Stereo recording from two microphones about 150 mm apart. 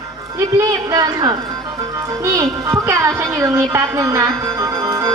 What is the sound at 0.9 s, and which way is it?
Speech, 25° right (ahead or behind).